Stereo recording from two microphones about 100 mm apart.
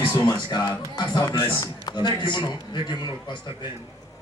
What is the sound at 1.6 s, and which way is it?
A man's voice, 45° left (ahead or behind).